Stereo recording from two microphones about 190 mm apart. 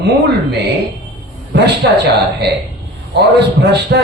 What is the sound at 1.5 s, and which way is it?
Speech, 60° right (ahead or behind).